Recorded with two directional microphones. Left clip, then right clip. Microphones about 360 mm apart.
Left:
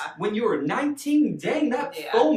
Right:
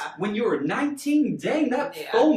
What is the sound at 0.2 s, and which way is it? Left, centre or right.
Speech, centre.